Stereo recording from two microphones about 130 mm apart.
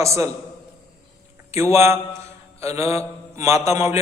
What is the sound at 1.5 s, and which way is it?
A man's voice, 20° right (ahead or behind).